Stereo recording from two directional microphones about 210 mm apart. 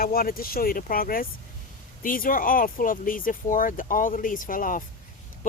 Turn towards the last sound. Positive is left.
turn(degrees=35)  # may be behind; listen again after turning